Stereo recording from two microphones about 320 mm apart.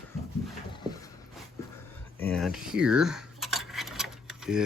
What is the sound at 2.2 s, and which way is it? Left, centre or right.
Cutlery, centre.